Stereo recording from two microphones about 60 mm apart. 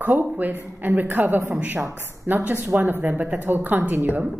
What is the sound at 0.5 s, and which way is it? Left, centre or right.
A woman's voice, right.